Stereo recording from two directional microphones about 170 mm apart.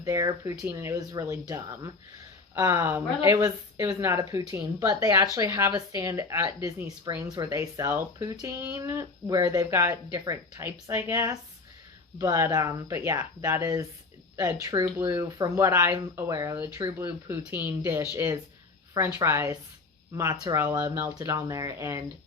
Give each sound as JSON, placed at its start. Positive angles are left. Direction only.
{"t": 0.0, "sound": "speech", "side_deg": -20}